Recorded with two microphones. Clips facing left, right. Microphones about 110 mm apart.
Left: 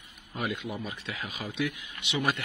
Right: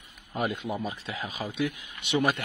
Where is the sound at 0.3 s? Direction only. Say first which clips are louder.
Right 3 dB; 35° right (ahead or behind).